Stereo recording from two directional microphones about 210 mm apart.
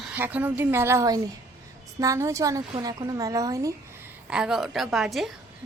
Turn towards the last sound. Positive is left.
turn(degrees=0)  # may be behind; listen again after turning